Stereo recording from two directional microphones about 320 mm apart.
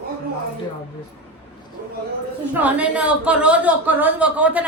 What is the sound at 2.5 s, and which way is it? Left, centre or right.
A woman's voice, centre.